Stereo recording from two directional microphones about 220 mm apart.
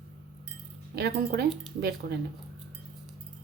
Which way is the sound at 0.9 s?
45° right (ahead or behind).